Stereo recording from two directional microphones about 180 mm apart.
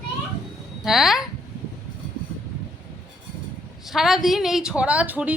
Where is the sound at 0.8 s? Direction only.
Centre (ahead or behind).